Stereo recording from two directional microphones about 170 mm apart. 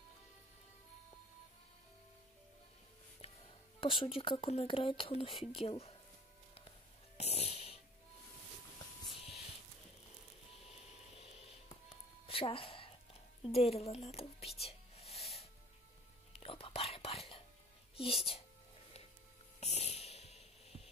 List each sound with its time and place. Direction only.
3.2 s a woman's voice: 30° left (ahead or behind)
7.2 s a sound: 40° left (ahead or behind)
10.6 s a sound: 35° left (ahead or behind)
12.3 s music: 35° left (ahead or behind)
13.4 s a woman's voice: 35° left (ahead or behind)
14.6 s music: 35° left (ahead or behind)
16.3 s whispering: 35° left (ahead or behind)
17.9 s a woman's voice: 35° left (ahead or behind)
19.6 s a sound: 40° left (ahead or behind)